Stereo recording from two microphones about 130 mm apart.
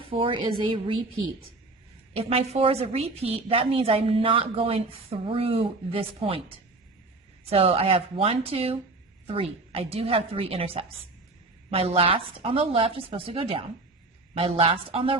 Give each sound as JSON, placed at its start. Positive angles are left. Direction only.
{"t": 0.1, "sound": "a woman's voice", "side_deg": -40}
{"t": 2.1, "sound": "a woman's voice", "side_deg": -50}